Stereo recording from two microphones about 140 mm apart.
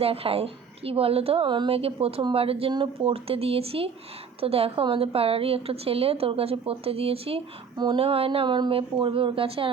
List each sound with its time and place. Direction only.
0.0 s a woman's voice: 45° right (ahead or behind)